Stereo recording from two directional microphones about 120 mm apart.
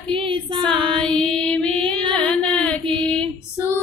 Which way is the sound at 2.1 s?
10° left (ahead or behind).